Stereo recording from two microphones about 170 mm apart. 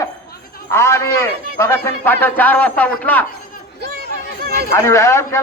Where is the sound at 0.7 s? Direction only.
15° left (ahead or behind).